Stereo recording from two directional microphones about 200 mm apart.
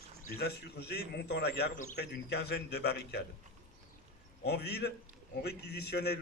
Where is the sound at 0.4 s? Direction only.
55° left (ahead or behind).